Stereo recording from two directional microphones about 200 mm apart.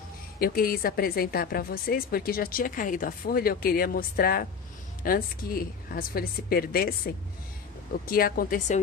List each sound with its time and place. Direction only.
0.4 s a woman's voice: 45° left (ahead or behind)